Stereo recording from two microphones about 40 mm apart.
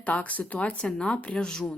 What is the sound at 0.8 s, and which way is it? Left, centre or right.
Speech, left.